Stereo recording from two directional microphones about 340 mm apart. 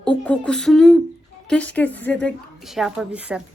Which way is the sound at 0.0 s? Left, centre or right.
Centre.